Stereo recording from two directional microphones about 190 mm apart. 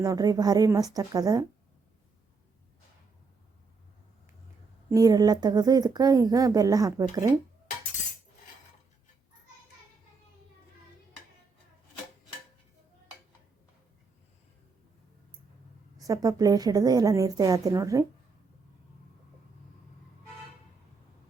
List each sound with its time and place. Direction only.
0.0 s speech: 20° right (ahead or behind)
4.9 s speech: 20° right (ahead or behind)
16.0 s speech: 20° right (ahead or behind)